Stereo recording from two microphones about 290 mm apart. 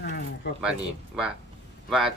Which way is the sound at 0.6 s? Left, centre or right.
Centre.